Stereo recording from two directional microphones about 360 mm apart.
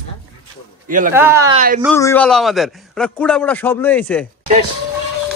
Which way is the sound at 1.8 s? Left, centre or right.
Centre.